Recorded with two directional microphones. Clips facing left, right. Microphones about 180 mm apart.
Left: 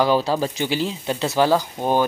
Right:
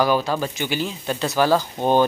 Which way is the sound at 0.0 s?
30° left (ahead or behind).